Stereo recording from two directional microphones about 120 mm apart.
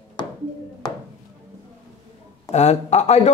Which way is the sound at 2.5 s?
70° left (ahead or behind).